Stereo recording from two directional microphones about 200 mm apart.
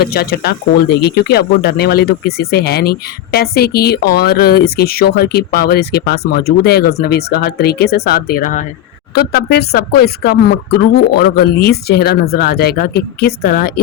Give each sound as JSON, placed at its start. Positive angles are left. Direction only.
{"t": 0.0, "sound": "speech", "side_deg": 50}